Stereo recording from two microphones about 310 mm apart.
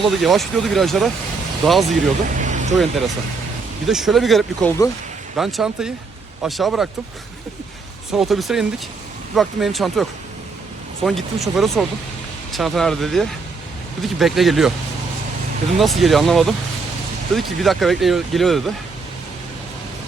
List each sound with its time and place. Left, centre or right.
0.0 s speech: centre
2.2 s vehicle: right
3.8 s speech: centre
8.1 s speech: centre
15.8 s speech: centre